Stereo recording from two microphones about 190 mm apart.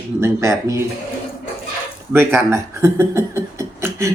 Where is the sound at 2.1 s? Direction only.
15° right (ahead or behind).